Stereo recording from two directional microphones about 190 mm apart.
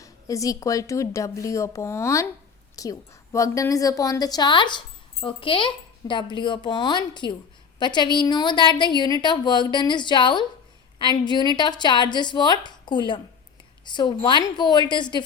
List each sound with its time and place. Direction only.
0.0 s a woman's voice: 15° left (ahead or behind)